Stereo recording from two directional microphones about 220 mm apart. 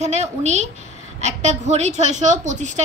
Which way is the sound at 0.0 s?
30° right (ahead or behind).